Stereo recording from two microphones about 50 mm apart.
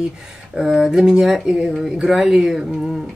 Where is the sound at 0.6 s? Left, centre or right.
Centre.